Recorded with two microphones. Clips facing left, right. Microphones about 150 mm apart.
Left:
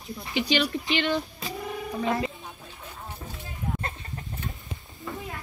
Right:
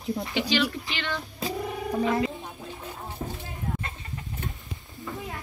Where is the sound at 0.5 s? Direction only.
20° left (ahead or behind).